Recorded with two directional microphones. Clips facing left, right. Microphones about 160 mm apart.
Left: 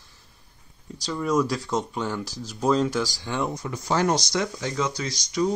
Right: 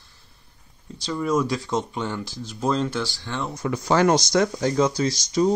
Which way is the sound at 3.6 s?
85° right.